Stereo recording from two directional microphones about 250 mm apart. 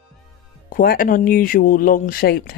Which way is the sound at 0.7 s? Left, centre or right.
Left.